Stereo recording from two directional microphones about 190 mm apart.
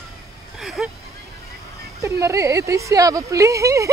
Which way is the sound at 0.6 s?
Centre (ahead or behind).